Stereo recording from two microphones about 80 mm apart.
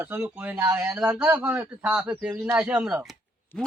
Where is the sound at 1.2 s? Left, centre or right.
Right.